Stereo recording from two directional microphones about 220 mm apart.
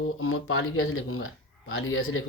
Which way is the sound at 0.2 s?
70° left (ahead or behind).